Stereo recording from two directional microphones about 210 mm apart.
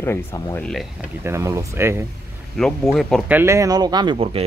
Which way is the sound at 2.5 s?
Centre (ahead or behind).